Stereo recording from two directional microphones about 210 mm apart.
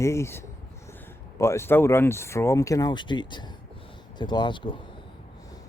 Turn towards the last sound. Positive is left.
turn(degrees=20)  # may be behind; listen again after turning